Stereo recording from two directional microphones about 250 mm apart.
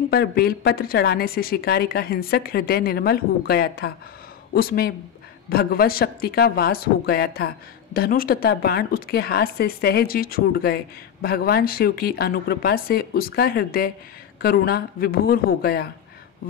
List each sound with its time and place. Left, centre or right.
0.1 s speech: left